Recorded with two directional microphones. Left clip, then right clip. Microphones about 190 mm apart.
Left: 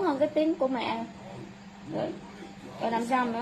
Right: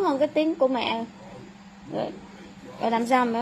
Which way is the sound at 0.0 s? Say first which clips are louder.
Right 3 dB; 30° right (ahead or behind).